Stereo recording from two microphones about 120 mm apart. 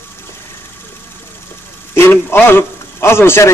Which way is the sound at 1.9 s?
20° left (ahead or behind).